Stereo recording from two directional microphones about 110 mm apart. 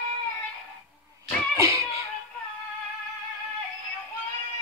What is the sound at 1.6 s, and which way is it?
Music, 25° right (ahead or behind).